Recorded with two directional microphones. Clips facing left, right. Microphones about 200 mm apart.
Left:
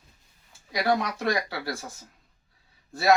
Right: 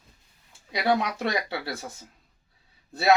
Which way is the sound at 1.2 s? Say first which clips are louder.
Left 1 dB; 25° right (ahead or behind).